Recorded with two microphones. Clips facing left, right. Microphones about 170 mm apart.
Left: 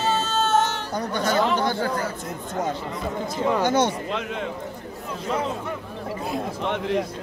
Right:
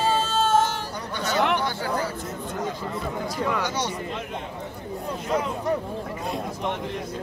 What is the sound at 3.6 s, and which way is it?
Speech, 50° left (ahead or behind).